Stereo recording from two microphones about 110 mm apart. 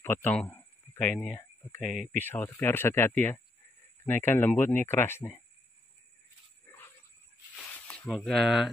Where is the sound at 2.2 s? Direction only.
20° left (ahead or behind).